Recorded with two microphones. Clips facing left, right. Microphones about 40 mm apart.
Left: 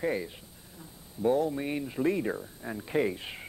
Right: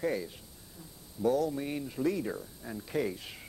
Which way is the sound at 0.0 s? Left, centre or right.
Left.